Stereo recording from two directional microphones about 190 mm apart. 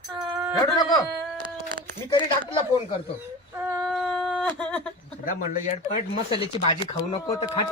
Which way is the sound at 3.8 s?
Centre (ahead or behind).